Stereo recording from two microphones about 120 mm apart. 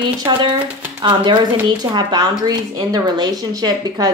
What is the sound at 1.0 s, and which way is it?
A woman's voice, 45° right (ahead or behind).